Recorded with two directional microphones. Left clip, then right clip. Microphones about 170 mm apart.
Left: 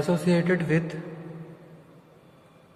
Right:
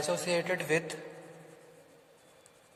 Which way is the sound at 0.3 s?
30° right (ahead or behind).